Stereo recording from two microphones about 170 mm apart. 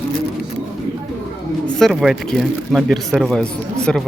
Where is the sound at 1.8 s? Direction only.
Centre (ahead or behind).